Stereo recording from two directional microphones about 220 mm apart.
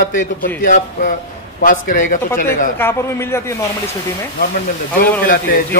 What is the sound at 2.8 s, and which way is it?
Speech, 10° left (ahead or behind).